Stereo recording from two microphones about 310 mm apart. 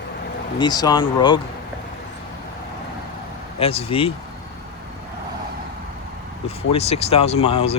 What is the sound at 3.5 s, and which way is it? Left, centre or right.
Speech, centre.